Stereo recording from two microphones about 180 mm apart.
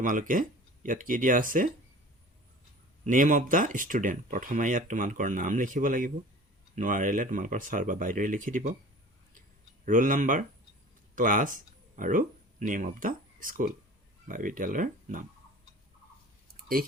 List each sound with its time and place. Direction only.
0.0 s speech: 45° right (ahead or behind)
3.0 s speech: 45° right (ahead or behind)
9.8 s speech: 50° right (ahead or behind)
16.6 s clicking: 55° right (ahead or behind)